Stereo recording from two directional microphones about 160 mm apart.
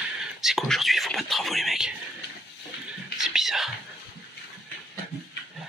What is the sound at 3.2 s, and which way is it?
Whispering, centre (ahead or behind).